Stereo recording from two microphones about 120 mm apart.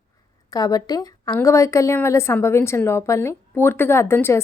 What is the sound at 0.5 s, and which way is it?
A woman's voice, 35° left (ahead or behind).